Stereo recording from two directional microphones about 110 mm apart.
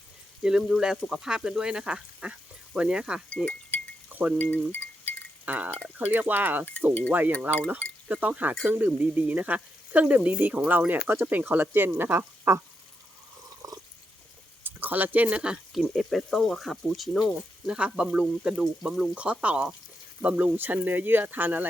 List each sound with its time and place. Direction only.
0.4 s speech: 5° right (ahead or behind)
3.2 s chink: 10° left (ahead or behind)
4.1 s speech: 15° right (ahead or behind)
4.4 s a sound: 15° left (ahead or behind)
5.5 s speech: 15° right (ahead or behind)
13.6 s cat: 30° right (ahead or behind)
14.6 s speech: 15° right (ahead or behind)